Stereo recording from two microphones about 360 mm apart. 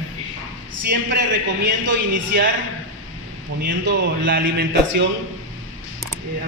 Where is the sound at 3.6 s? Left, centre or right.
Right.